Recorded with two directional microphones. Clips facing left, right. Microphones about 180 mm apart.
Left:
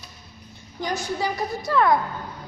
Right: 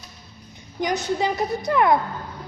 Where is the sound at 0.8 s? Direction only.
20° right (ahead or behind).